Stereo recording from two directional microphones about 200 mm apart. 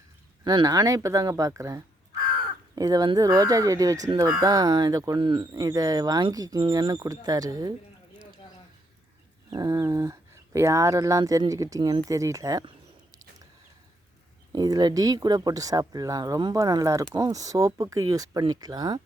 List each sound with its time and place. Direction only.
0.4 s speech: 20° right (ahead or behind)
9.5 s speech: 20° right (ahead or behind)
14.5 s speech: 20° right (ahead or behind)